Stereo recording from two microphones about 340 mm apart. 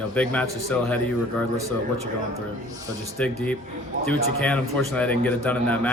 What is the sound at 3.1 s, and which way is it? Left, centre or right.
A man's voice, centre.